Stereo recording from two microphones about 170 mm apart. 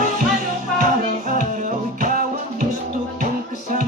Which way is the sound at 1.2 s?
50° right (ahead or behind).